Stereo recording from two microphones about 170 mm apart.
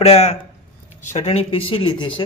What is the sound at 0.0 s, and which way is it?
Speech, 40° left (ahead or behind).